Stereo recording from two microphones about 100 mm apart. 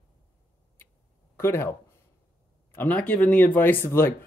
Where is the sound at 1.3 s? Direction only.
25° left (ahead or behind).